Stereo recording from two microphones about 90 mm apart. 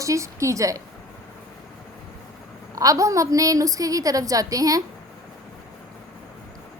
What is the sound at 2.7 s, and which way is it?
A woman's voice, 40° right (ahead or behind).